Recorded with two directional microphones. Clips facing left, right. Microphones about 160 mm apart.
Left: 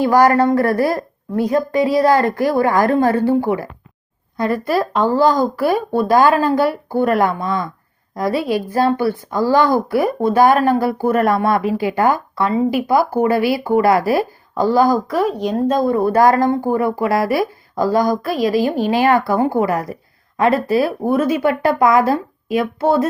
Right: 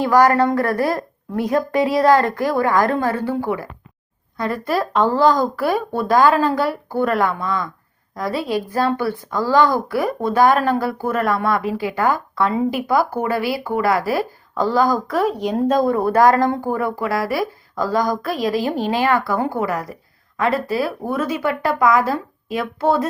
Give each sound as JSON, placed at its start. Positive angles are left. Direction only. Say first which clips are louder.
{"t": 0.4, "sound": "a woman's voice", "louder": "left 3 dB", "side_deg": 30}
{"t": 0.8, "sound": "a woman's voice", "louder": "left 3 dB", "side_deg": 5}
{"t": 4.4, "sound": "speech", "louder": "left 3 dB", "side_deg": 10}
{"t": 12.4, "sound": "a woman's voice", "louder": "left 2 dB", "side_deg": 5}
{"t": 16.3, "sound": "speech", "louder": "left 3 dB", "side_deg": 10}